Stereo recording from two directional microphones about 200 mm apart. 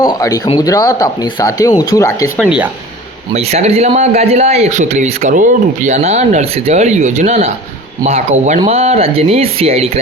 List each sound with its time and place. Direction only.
0.0 s speech: 20° left (ahead or behind)
2.4 s speech: 5° right (ahead or behind)
3.3 s speech: 30° right (ahead or behind)